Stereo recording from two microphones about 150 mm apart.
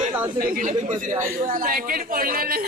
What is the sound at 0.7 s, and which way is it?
A man's voice, 55° right (ahead or behind).